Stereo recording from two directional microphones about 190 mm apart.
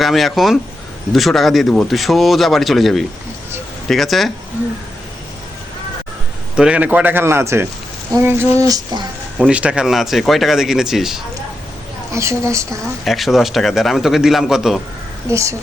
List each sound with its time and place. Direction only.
0.0 s speech: centre (ahead or behind)
6.6 s a man's voice: 5° right (ahead or behind)
9.4 s speech: 5° right (ahead or behind)
12.1 s a man's voice: 15° right (ahead or behind)
13.1 s speech: centre (ahead or behind)
15.3 s a man's voice: 15° right (ahead or behind)